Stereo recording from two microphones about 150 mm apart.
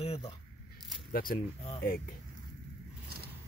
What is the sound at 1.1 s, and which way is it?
Speech, 70° left (ahead or behind).